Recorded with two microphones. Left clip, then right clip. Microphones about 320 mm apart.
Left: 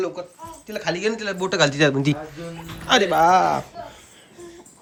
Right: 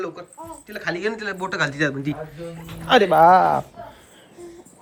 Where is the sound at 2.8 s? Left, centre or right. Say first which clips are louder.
Right 3 dB; centre.